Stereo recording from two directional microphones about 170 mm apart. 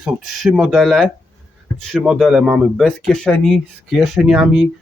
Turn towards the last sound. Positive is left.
turn(degrees=-5)  # may be behind; listen again after turning